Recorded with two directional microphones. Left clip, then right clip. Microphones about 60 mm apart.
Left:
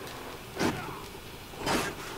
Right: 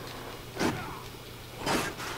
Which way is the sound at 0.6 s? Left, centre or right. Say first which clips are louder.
Even; centre.